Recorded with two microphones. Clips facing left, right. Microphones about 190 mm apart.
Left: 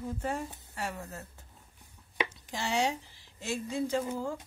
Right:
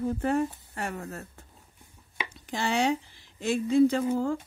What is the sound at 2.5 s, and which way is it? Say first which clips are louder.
A woman's voice: right 6 dB; 60° right (ahead or behind).